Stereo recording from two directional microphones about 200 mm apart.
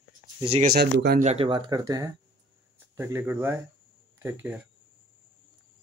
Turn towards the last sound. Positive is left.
turn(degrees=-10)  # may be behind; listen again after turning